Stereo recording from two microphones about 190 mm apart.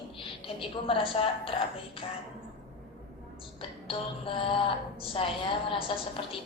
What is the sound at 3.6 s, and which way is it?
A woman's voice, 25° left (ahead or behind).